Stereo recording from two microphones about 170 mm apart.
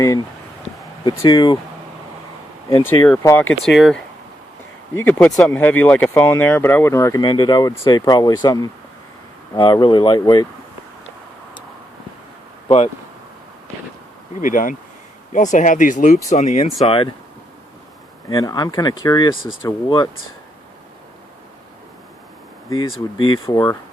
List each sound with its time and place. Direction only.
1.0 s speech: 20° left (ahead or behind)
2.8 s speech: 15° left (ahead or behind)
3.6 s speech: centre (ahead or behind); by 10.4 s 25° left (ahead or behind)
12.6 s speech: 40° left (ahead or behind)
14.4 s speech: 50° left (ahead or behind); by 17.1 s 35° left (ahead or behind)
18.3 s speech: 20° left (ahead or behind)
22.7 s speech: 25° left (ahead or behind)